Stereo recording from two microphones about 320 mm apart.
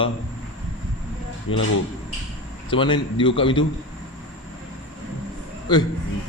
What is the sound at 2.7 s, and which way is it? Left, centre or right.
Speech, centre.